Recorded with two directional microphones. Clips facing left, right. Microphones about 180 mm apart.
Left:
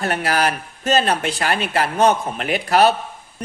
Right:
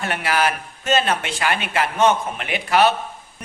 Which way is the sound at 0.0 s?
40° left (ahead or behind).